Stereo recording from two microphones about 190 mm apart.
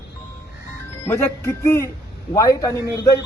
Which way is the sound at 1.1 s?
15° left (ahead or behind).